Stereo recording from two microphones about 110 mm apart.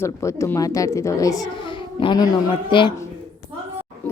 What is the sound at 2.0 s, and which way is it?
Speech, 50° left (ahead or behind).